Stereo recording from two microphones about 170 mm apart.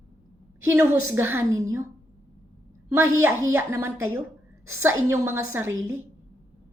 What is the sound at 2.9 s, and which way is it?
A woman's voice, 15° right (ahead or behind).